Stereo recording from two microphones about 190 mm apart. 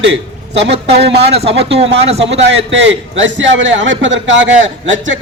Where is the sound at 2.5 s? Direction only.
75° right (ahead or behind).